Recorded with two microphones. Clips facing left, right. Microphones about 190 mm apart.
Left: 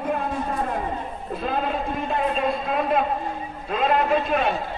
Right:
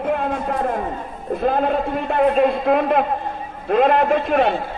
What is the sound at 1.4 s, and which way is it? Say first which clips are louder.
A man's voice: right 7 dB; 60° right (ahead or behind).